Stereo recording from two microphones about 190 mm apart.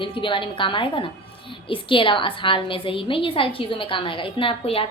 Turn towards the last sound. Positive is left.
turn(degrees=30)  # may be behind; listen again after turning